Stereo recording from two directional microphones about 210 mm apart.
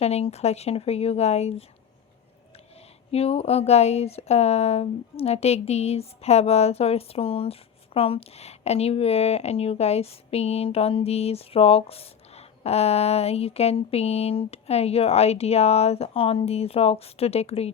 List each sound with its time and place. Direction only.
0.0 s speech: 30° left (ahead or behind)
3.1 s speech: 30° left (ahead or behind)